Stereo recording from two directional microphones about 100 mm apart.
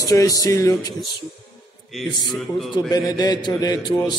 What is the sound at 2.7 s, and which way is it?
A man's voice, 40° left (ahead or behind).